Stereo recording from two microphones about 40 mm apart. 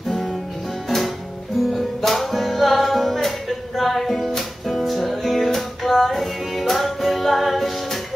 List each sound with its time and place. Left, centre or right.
0.8 s music: centre